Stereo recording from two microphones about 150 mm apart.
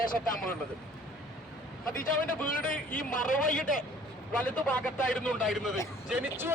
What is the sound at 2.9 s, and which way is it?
Speech, 65° left (ahead or behind).